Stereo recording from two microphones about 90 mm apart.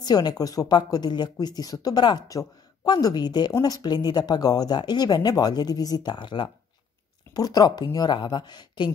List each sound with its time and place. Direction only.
0.0 s speech: 50° left (ahead or behind)
7.3 s speech: 45° left (ahead or behind)